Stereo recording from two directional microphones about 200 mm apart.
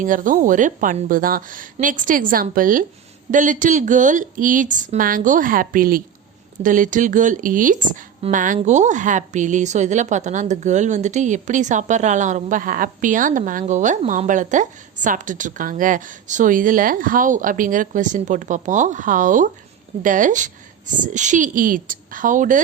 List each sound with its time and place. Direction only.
0.0 s a woman's voice: 40° right (ahead or behind)